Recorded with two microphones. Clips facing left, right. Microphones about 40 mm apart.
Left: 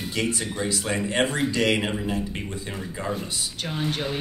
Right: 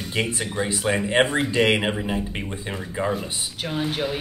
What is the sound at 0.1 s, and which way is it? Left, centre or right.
Speech, right.